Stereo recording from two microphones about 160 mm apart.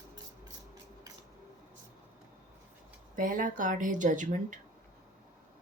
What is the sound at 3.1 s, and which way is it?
Speech, 55° right (ahead or behind).